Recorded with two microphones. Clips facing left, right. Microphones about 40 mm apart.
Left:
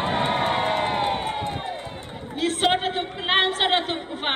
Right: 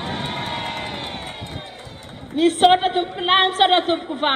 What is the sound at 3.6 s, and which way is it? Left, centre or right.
Speech, centre.